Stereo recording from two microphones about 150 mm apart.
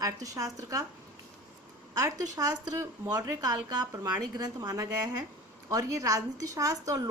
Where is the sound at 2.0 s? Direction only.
25° right (ahead or behind).